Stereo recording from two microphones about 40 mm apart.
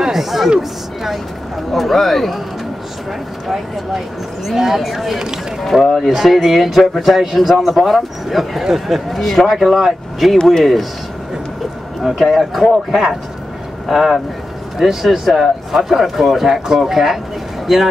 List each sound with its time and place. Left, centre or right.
0.0 s speech: centre
3.4 s speech: centre
10.3 s speech: centre
10.6 s speech: centre
12.0 s speech: centre
13.8 s speech: centre